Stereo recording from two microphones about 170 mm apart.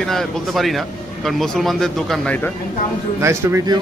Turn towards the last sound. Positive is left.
turn(degrees=-15)  # may be behind; listen again after turning